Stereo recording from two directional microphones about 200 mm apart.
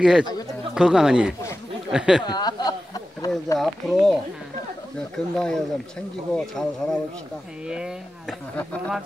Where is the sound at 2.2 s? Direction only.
20° left (ahead or behind).